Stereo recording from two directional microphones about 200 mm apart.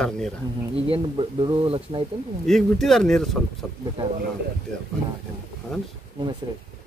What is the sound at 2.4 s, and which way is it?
Speech, centre (ahead or behind).